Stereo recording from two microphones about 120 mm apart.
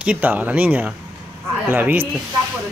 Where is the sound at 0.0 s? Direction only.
10° right (ahead or behind).